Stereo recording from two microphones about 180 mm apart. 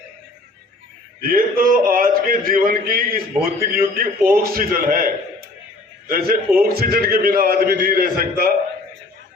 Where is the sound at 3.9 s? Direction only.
55° right (ahead or behind).